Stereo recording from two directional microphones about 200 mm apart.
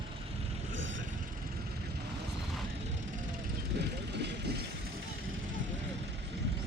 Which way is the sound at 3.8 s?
60° right (ahead or behind).